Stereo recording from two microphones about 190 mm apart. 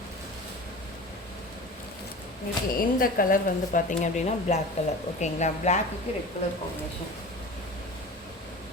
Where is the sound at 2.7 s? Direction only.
50° left (ahead or behind).